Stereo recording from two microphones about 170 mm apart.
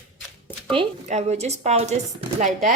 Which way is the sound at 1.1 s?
40° right (ahead or behind).